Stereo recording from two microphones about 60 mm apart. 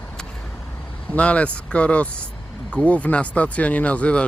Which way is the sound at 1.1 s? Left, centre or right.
Left.